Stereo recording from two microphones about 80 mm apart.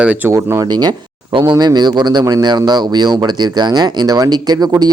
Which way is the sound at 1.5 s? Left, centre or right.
Right.